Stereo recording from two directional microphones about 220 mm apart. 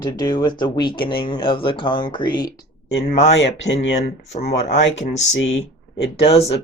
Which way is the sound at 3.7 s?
15° left (ahead or behind).